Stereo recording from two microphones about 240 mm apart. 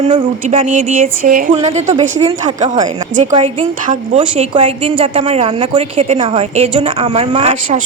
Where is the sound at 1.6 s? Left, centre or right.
Right.